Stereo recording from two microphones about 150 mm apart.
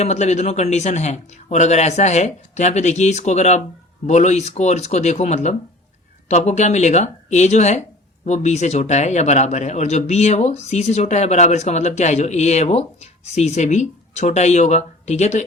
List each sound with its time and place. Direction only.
0.0 s speech: 50° left (ahead or behind)